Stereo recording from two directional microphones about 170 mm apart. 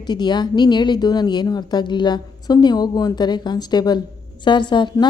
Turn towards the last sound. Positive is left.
turn(degrees=25)  # may be behind; listen again after turning